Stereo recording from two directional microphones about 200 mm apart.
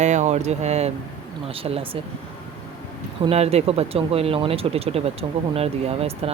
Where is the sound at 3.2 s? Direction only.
30° right (ahead or behind).